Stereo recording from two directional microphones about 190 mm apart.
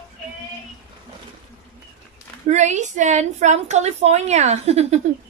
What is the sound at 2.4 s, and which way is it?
A woman's voice, 40° right (ahead or behind).